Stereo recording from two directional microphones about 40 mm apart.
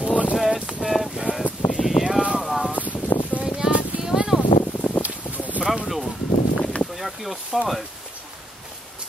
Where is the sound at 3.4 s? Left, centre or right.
Centre.